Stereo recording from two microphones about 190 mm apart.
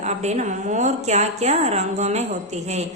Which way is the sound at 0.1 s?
40° right (ahead or behind).